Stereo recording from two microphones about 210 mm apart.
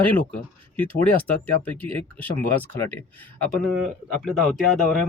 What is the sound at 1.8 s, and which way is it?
Speech, 10° left (ahead or behind).